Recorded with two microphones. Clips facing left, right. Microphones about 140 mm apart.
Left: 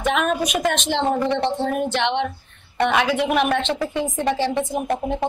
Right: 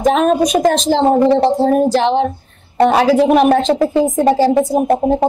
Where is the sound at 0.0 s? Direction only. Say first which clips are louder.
Right 9 dB; 35° right (ahead or behind).